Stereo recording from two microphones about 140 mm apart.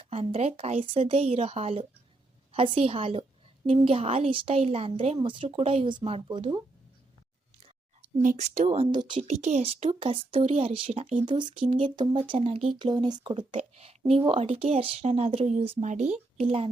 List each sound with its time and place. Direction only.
0.0 s speech: 45° right (ahead or behind)
8.0 s speech: 65° right (ahead or behind); by 9.2 s 35° right (ahead or behind)
9.2 s speech: 55° right (ahead or behind)
9.9 s speech: 40° right (ahead or behind)
11.3 s speech: 35° right (ahead or behind)
12.8 s speech: 30° right (ahead or behind); by 16.0 s 60° right (ahead or behind)
16.4 s speech: 45° right (ahead or behind)